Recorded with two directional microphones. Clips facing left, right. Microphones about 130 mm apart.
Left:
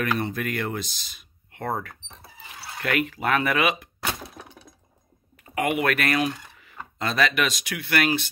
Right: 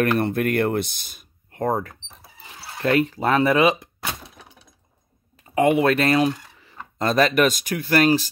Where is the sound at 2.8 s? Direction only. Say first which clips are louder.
Right 6 dB; 30° right (ahead or behind).